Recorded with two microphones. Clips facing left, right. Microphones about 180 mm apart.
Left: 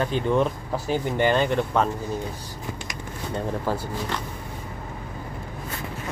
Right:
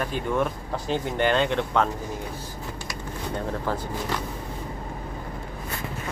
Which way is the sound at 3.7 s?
10° left (ahead or behind).